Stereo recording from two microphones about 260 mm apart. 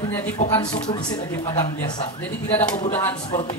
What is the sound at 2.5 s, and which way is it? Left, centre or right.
Speech, centre.